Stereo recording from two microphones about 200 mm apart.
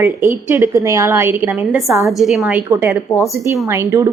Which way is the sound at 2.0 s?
Centre (ahead or behind).